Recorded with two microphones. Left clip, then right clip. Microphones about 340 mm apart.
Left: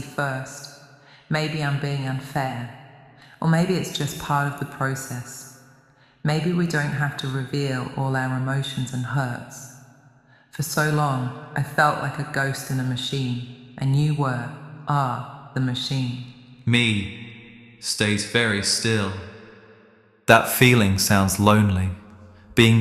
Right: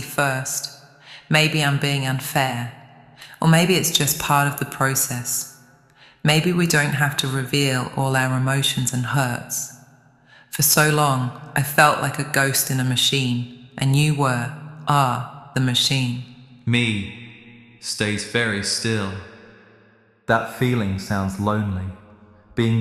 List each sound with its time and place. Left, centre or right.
0.2 s speech: right
16.6 s speech: centre
20.2 s speech: left